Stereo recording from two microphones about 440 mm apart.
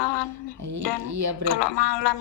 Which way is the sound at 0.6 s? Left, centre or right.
Right.